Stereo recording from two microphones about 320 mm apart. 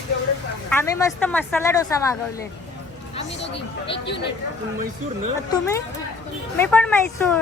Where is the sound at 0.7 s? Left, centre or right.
Centre.